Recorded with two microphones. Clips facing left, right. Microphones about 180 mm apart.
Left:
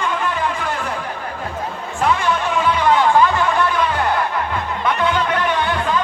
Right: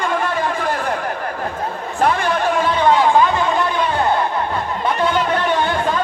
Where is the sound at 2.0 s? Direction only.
40° right (ahead or behind).